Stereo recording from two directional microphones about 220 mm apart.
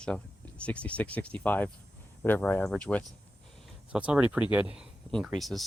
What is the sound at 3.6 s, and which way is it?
Speech, 5° right (ahead or behind).